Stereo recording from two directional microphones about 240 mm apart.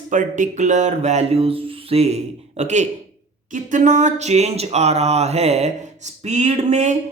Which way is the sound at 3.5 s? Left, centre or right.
Right.